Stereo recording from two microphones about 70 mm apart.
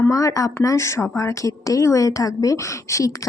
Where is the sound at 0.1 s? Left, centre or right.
Left.